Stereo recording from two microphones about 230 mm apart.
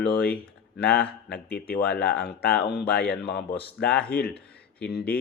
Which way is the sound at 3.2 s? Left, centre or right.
Left.